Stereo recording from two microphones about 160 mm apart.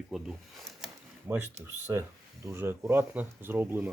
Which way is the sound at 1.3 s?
15° right (ahead or behind).